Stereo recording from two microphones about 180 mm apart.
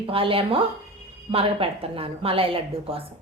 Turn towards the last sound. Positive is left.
turn(degrees=-30)  # may be behind; listen again after turning